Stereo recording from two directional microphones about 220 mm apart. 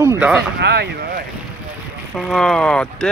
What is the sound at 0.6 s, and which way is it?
Speech, 50° right (ahead or behind).